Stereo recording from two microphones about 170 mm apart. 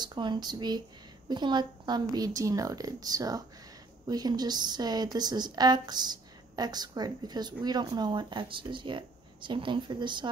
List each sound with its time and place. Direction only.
0.0 s speech: 25° right (ahead or behind)